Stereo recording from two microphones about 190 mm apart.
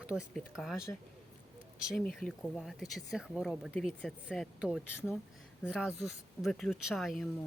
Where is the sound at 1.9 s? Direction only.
Centre (ahead or behind).